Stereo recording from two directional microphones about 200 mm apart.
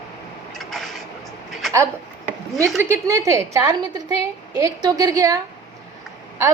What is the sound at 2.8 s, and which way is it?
A woman's voice, 15° right (ahead or behind).